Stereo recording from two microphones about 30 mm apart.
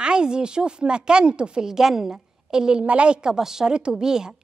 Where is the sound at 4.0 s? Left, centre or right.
Right.